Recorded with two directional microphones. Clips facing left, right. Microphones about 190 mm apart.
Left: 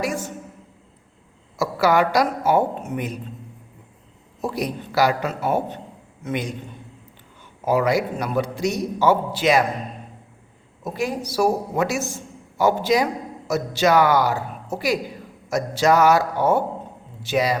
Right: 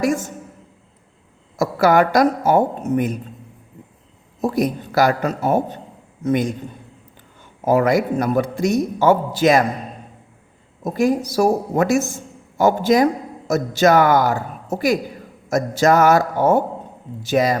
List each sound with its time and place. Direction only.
0.0 s a man's voice: 45° right (ahead or behind)
1.5 s a man's voice: 50° right (ahead or behind)
4.4 s a man's voice: 45° right (ahead or behind)
7.6 s a man's voice: 50° right (ahead or behind)
10.8 s a man's voice: 45° right (ahead or behind)